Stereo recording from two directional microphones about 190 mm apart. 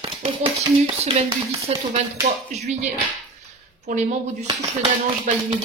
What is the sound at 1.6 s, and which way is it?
A woman's voice, 35° right (ahead or behind).